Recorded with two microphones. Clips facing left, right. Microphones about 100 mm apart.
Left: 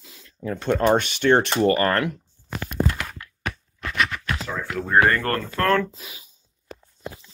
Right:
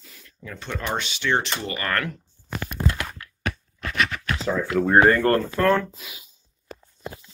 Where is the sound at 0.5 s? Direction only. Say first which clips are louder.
Left 10 dB; 45° left (ahead or behind).